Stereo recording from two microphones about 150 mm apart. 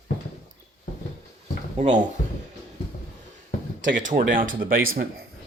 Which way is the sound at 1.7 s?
50° right (ahead or behind).